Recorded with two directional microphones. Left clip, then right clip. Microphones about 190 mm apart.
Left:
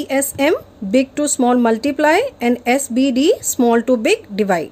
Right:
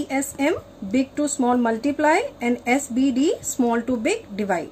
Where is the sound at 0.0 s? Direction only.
55° left (ahead or behind).